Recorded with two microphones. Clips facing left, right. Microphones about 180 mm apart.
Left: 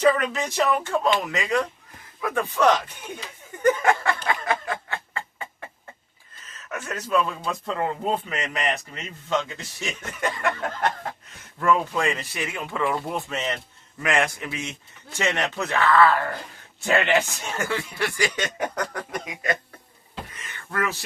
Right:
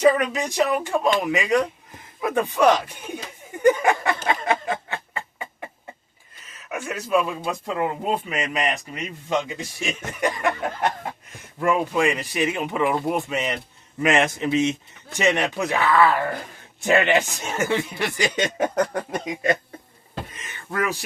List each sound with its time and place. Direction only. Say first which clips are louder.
0.0 s a man's voice: right 2 dB; 15° right (ahead or behind)
3.6 s snicker: right 2 dB; 15° right (ahead or behind)
6.5 s a man's voice: right 2 dB; 10° right (ahead or behind); by 19.5 s 25° right (ahead or behind)
20.3 s a sound: right 1 dB; 20° right (ahead or behind)